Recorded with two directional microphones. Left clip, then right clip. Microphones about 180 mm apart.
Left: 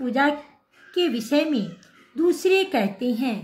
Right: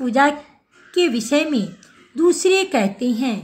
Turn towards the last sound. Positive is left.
turn(degrees=-20)  # may be behind; listen again after turning